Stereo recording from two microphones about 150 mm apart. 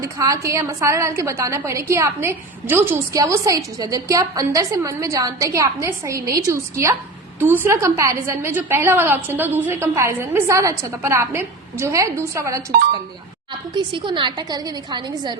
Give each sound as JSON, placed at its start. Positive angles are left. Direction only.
{"t": 0.0, "sound": "a woman's voice", "side_deg": -20}
{"t": 13.7, "sound": "a woman's voice", "side_deg": -30}